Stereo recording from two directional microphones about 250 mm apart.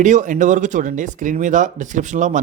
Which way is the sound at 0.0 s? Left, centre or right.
Right.